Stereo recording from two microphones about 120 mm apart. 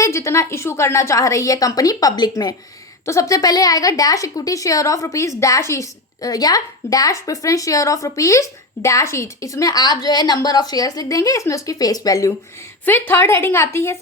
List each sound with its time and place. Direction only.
0.0 s a woman's voice: 25° left (ahead or behind)
12.8 s a woman's voice: 15° left (ahead or behind)